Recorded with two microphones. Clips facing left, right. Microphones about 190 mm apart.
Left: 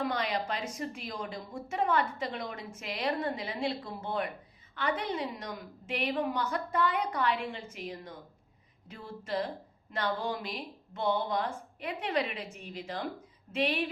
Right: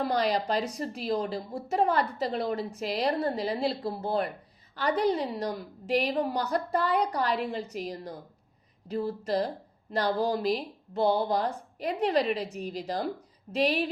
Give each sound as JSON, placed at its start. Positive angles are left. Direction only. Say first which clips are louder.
{"t": 0.0, "sound": "speech", "louder": "right 5 dB", "side_deg": -35}